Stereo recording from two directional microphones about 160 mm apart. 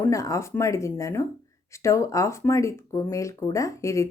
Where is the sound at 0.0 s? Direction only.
20° left (ahead or behind).